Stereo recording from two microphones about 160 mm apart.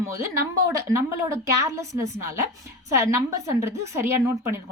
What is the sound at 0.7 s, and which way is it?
A woman's voice, 20° right (ahead or behind).